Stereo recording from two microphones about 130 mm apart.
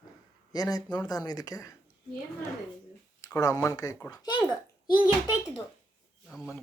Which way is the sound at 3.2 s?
25° left (ahead or behind).